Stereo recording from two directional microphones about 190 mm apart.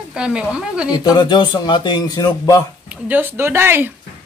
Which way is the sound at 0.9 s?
20° left (ahead or behind).